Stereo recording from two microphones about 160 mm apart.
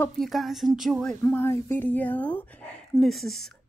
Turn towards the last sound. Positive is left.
turn(degrees=0)  # may be behind; listen again after turning